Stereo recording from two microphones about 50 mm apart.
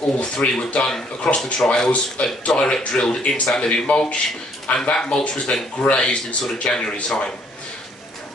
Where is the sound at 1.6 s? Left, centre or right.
Left.